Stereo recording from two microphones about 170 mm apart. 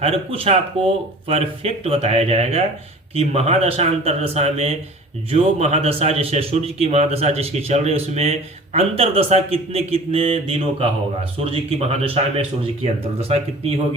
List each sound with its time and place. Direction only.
0.0 s a man's voice: 35° right (ahead or behind)